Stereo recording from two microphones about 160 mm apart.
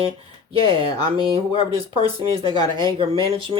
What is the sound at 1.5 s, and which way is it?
Speech, 35° right (ahead or behind).